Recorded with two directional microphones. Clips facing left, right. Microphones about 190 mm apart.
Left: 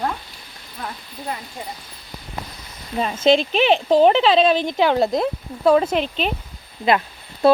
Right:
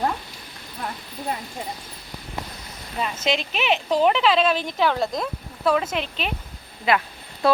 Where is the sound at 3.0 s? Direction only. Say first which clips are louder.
Left 8 dB; 30° left (ahead or behind).